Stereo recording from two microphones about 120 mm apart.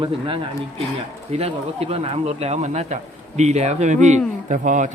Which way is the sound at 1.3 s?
60° right (ahead or behind).